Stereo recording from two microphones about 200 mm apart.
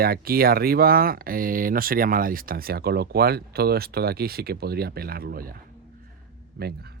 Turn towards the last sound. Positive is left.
turn(degrees=-50)  # may be behind; listen again after turning